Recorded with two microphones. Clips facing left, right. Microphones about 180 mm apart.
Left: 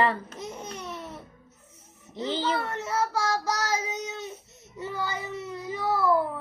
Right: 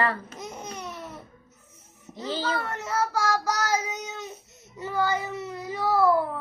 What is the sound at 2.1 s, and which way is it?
Child singing, 20° left (ahead or behind).